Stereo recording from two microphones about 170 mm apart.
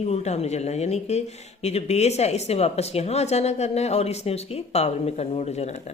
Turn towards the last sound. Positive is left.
turn(degrees=40)  # may be behind; listen again after turning